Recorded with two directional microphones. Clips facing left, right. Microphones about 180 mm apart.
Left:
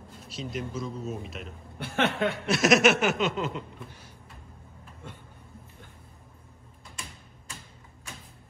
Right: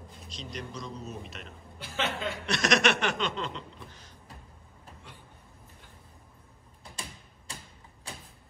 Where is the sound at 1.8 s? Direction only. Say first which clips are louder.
Left 6 dB; 60° left (ahead or behind).